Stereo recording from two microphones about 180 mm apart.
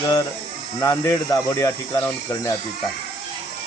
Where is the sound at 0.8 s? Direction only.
15° left (ahead or behind).